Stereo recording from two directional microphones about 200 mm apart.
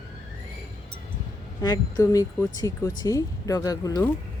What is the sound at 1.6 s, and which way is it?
Speech, 20° left (ahead or behind).